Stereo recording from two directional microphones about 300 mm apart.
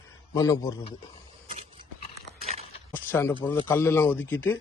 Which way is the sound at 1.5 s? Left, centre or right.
Centre.